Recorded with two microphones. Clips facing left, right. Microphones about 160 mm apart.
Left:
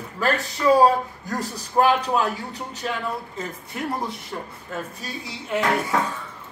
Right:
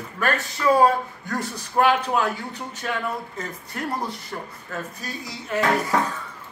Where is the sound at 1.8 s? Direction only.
35° left (ahead or behind).